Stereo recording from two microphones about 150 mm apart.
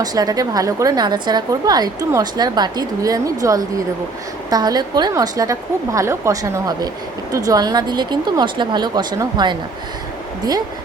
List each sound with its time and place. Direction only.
0.0 s a woman's voice: 25° right (ahead or behind)